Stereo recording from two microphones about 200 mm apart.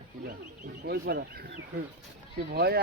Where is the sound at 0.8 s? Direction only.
50° right (ahead or behind).